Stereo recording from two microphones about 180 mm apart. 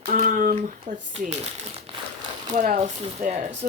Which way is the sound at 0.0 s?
50° right (ahead or behind).